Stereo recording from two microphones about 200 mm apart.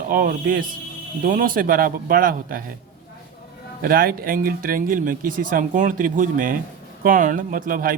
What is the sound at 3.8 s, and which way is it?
Speech, 45° right (ahead or behind).